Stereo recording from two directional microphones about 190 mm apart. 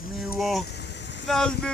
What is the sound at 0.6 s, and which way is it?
Vehicle, 60° left (ahead or behind).